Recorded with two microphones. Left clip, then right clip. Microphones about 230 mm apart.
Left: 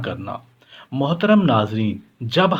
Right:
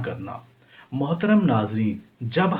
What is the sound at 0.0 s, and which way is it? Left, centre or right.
Speech, left.